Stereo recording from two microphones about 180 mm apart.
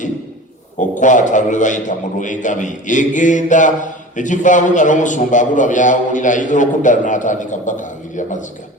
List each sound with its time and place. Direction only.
0.8 s a man's voice: 45° left (ahead or behind)